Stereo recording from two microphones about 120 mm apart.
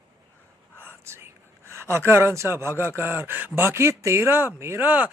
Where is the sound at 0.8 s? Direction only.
20° right (ahead or behind).